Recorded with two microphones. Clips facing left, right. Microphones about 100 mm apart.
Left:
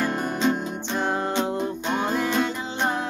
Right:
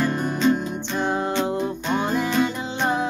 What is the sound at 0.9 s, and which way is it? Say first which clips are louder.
Music: right 1 dB; 5° left (ahead or behind).